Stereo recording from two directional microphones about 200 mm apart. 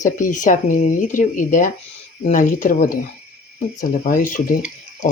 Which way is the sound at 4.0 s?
45° left (ahead or behind).